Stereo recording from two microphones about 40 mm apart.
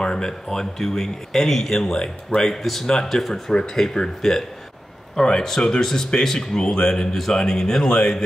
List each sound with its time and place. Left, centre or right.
0.0 s speech: centre